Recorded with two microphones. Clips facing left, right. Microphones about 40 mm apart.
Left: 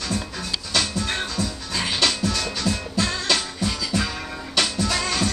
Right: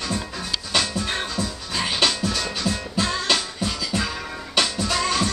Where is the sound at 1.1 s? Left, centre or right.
Centre.